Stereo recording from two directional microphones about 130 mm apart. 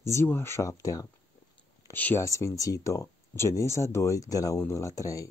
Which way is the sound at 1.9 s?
15° left (ahead or behind).